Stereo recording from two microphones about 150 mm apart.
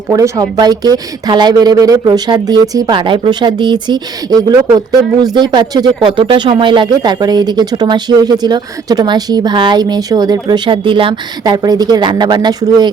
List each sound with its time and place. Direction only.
0.1 s speech: 25° right (ahead or behind)